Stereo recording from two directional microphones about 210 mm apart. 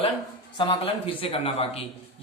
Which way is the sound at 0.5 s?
25° left (ahead or behind).